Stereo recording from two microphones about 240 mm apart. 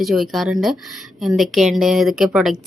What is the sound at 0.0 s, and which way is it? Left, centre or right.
A woman's voice, centre.